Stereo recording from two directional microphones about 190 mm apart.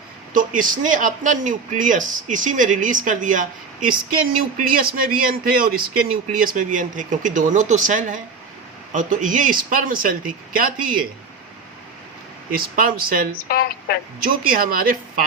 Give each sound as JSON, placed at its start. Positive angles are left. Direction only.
{"t": 0.3, "sound": "a man's voice", "side_deg": -45}
{"t": 12.5, "sound": "a man's voice", "side_deg": -50}
{"t": 13.5, "sound": "a woman's voice", "side_deg": 55}
{"t": 14.3, "sound": "a man's voice", "side_deg": -50}